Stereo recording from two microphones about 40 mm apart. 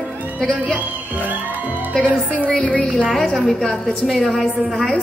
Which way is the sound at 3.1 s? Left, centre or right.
Centre.